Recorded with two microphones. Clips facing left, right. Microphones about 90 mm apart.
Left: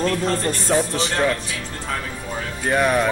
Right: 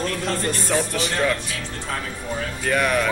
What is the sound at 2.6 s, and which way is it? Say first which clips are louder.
Speech: left 3 dB; 25° left (ahead or behind).